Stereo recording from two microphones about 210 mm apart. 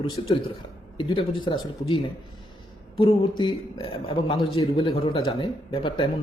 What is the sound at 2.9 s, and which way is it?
A man's voice, 20° left (ahead or behind).